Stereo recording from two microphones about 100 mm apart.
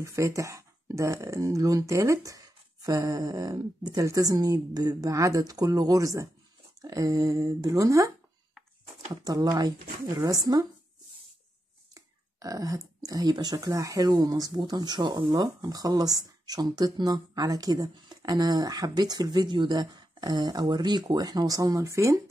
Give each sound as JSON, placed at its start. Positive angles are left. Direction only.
{"t": 0.0, "sound": "speech", "side_deg": -30}
{"t": 9.1, "sound": "speech", "side_deg": -40}
{"t": 11.9, "sound": "speech", "side_deg": -35}